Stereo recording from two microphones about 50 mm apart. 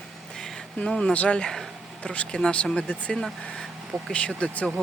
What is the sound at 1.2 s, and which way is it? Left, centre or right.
Speech, left.